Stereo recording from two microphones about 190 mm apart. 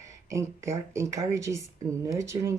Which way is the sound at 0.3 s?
15° right (ahead or behind).